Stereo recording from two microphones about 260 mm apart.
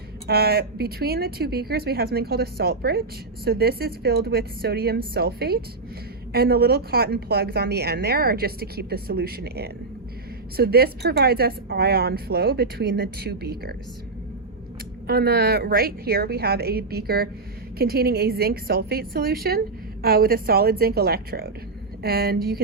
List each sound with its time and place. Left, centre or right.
0.3 s a woman's voice: right
15.0 s a woman's voice: right